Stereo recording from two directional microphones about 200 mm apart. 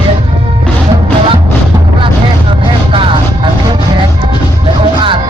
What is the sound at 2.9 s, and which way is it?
Vehicle, 25° right (ahead or behind).